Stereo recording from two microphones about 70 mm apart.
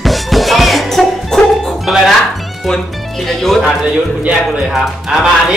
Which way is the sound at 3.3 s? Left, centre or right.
Centre.